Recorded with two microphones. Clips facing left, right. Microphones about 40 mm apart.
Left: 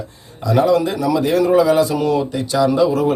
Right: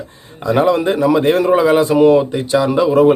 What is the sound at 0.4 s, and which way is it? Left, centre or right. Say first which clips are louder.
Speech: right 2 dB; right.